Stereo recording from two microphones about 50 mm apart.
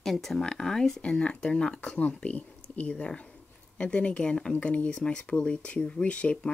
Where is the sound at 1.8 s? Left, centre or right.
Left.